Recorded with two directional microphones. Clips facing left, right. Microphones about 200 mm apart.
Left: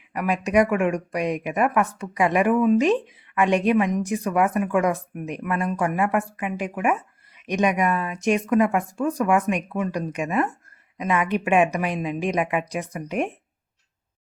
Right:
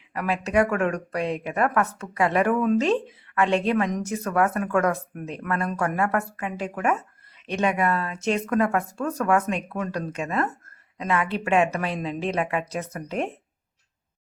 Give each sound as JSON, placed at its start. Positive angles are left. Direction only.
{"t": 0.1, "sound": "speech", "side_deg": 15}